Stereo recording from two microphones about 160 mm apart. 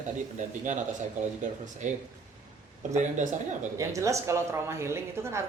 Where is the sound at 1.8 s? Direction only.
50° right (ahead or behind).